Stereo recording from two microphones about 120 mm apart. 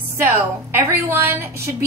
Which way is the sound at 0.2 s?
20° right (ahead or behind).